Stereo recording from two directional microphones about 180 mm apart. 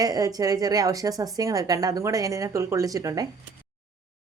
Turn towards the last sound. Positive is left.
turn(degrees=-20)  # may be behind; listen again after turning